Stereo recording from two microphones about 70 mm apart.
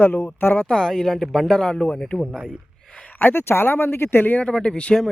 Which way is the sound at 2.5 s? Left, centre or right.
Centre.